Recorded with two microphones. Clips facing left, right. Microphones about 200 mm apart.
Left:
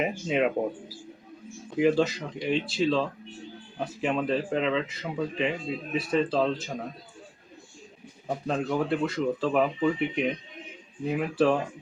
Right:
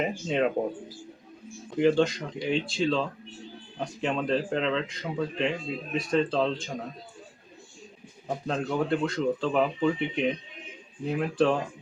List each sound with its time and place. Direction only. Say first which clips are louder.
0.0 s speech: left 1 dB; 5° left (ahead or behind)
8.4 s speech: even; 5° left (ahead or behind)